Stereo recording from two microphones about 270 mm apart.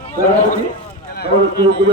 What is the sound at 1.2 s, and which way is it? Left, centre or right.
Speech, left.